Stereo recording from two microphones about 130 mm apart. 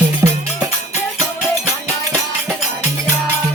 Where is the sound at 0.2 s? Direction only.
25° right (ahead or behind).